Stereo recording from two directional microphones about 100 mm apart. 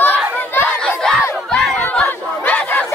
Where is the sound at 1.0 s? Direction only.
Centre (ahead or behind).